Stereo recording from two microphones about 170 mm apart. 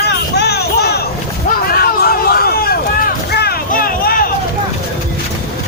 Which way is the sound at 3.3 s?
70° left (ahead or behind).